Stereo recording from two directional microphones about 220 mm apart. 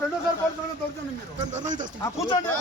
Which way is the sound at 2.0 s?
15° left (ahead or behind).